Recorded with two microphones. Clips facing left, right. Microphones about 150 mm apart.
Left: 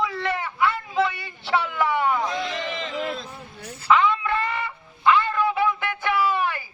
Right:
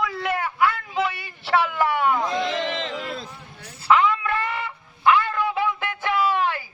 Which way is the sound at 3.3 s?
35° left (ahead or behind).